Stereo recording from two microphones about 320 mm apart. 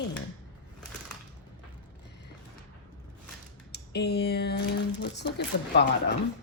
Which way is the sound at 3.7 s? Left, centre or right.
Left.